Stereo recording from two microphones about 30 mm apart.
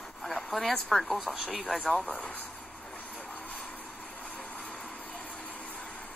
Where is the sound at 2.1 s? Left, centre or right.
Left.